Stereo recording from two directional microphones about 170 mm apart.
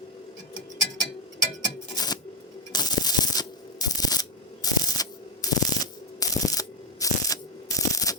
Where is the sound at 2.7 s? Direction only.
25° left (ahead or behind).